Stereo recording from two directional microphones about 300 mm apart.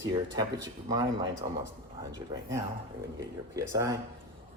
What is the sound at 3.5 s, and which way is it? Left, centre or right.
Speech, centre.